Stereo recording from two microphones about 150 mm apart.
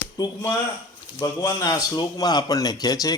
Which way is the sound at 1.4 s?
25° left (ahead or behind).